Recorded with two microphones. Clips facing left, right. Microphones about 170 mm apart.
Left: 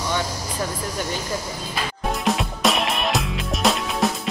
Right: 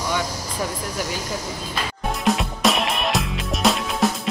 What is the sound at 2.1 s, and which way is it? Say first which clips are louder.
Music: right 1 dB; centre (ahead or behind).